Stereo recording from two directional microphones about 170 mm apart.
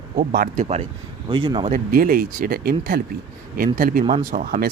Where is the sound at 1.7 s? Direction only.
55° right (ahead or behind).